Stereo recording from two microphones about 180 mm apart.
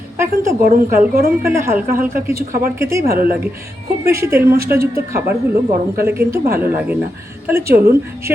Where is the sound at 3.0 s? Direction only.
55° right (ahead or behind).